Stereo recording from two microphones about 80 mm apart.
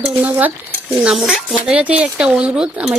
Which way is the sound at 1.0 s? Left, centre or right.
Centre.